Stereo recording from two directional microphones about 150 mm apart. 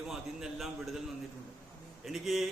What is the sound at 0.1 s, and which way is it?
Speech, centre (ahead or behind).